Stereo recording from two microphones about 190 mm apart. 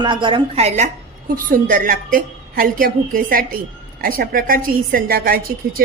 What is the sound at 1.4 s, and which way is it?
A woman's voice, 45° right (ahead or behind).